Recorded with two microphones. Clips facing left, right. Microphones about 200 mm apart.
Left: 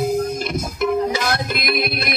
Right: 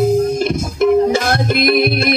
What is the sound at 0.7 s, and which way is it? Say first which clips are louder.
Music: right 8 dB; 50° right (ahead or behind).